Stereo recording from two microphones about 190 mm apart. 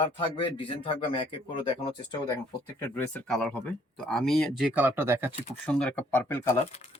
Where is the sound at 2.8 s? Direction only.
10° left (ahead or behind).